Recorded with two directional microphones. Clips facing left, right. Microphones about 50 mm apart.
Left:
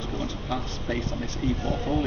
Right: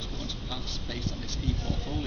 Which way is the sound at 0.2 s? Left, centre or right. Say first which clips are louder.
Left 8 dB; left.